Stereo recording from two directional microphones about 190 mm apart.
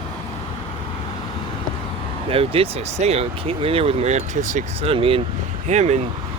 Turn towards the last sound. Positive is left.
turn(degrees=-35)  # may be behind; listen again after turning